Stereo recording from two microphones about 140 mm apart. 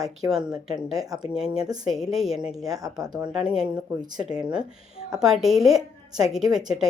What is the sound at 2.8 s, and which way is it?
Speech, 25° right (ahead or behind).